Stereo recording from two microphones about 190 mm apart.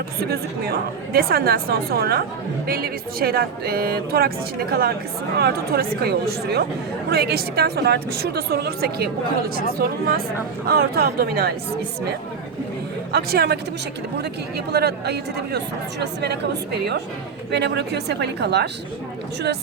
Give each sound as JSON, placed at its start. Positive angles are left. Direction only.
{"t": 0.2, "sound": "speech", "side_deg": -55}
{"t": 13.1, "sound": "speech", "side_deg": -60}
{"t": 14.7, "sound": "speech", "side_deg": -55}